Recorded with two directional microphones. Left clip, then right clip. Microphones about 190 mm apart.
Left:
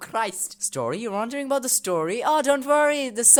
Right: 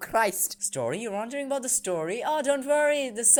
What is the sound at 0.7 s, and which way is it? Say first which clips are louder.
Speech: left 3 dB; 20° left (ahead or behind).